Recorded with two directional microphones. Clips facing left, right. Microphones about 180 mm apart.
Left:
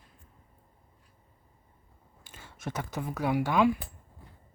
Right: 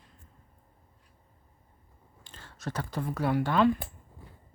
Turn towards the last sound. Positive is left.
turn(degrees=10)  # may be behind; listen again after turning